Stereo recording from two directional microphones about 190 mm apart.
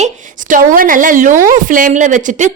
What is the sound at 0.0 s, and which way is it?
A woman's voice, 45° right (ahead or behind).